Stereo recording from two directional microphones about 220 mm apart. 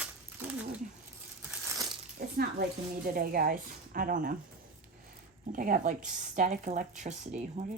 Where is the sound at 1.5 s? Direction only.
10° right (ahead or behind).